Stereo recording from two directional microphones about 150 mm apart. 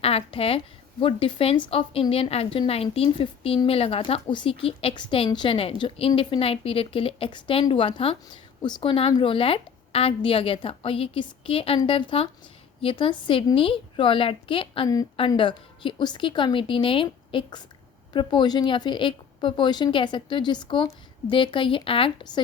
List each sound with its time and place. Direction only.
0.0 s a woman's voice: 40° left (ahead or behind)